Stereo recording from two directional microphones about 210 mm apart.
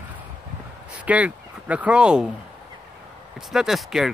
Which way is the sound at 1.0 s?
5° right (ahead or behind).